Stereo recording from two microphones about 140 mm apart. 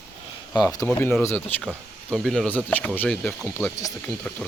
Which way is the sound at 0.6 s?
20° left (ahead or behind).